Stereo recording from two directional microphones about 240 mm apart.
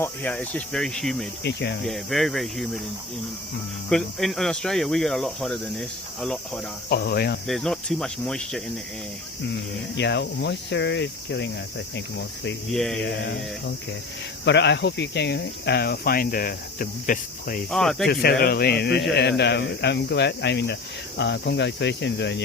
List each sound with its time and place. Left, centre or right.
0.0 s speech: centre
1.5 s speech: left
1.8 s speech: centre
3.8 s speech: centre
6.9 s speech: left
7.4 s speech: centre
10.0 s speech: left
12.7 s speech: centre
13.2 s speech: left
17.7 s speech: centre
18.1 s speech: left